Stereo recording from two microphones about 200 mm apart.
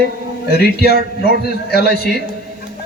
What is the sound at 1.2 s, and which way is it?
Speech, 55° left (ahead or behind).